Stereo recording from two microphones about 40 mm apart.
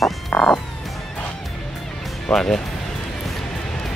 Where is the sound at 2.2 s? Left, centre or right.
Centre.